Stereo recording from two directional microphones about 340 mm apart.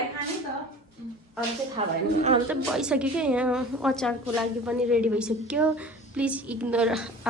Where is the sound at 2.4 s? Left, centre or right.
Centre.